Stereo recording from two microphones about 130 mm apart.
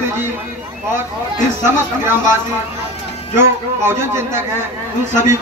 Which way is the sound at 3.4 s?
20° right (ahead or behind).